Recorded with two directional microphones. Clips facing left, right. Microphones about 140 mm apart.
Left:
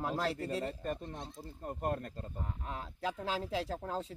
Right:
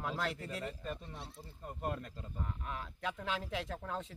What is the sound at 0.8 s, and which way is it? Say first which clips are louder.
Speech: left 5 dB; 45° left (ahead or behind).